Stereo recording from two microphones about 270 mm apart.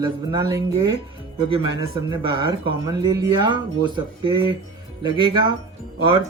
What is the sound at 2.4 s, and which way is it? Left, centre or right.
Speech, centre.